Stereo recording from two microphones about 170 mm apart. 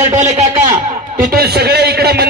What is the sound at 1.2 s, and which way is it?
A man's voice, 65° right (ahead or behind).